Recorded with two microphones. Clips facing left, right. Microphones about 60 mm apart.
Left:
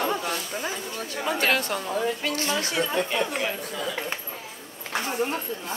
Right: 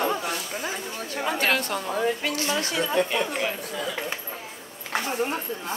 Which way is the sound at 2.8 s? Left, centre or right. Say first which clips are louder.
Right 2 dB; centre.